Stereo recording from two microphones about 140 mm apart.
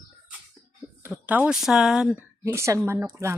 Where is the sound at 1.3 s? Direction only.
10° right (ahead or behind).